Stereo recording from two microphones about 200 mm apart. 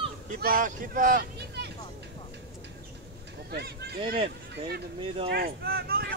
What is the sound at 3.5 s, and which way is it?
Speech, 55° right (ahead or behind).